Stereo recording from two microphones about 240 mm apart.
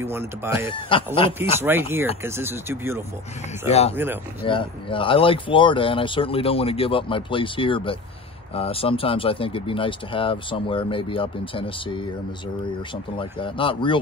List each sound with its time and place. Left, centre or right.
0.0 s speech: centre
0.7 s speech: left
1.6 s speech: centre
4.4 s speech: left